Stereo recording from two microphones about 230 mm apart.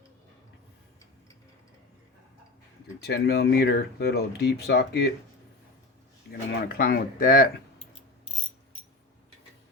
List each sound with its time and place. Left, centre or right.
3.0 s speech: left
6.5 s speech: left